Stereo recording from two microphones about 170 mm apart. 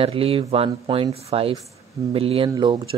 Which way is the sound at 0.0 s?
35° right (ahead or behind).